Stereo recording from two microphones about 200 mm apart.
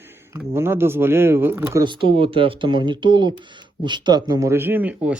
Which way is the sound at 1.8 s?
25° right (ahead or behind).